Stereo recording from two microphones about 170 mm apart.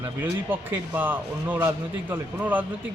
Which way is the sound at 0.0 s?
10° right (ahead or behind).